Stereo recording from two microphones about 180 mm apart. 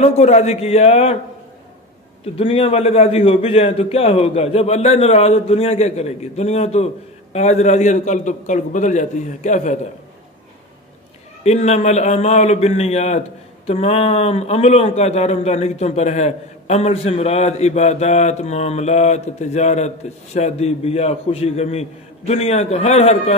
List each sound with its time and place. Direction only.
0.0 s a man's voice: 40° left (ahead or behind)
2.3 s a man's voice: 30° left (ahead or behind)
11.4 s a man's voice: 40° left (ahead or behind)